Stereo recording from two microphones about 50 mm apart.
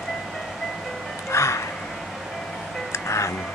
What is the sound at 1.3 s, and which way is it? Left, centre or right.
Music, left.